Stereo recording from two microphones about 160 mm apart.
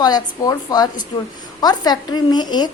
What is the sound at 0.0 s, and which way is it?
A woman's voice, 25° left (ahead or behind).